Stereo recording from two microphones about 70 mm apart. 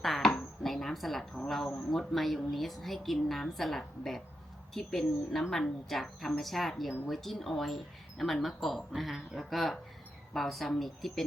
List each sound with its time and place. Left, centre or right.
0.0 s dishes: centre
0.3 s a sound: centre
1.5 s speech: centre